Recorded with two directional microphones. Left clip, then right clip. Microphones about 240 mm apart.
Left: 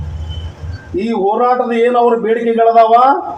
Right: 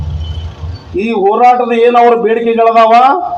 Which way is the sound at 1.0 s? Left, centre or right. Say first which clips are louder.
Right 5 dB; left.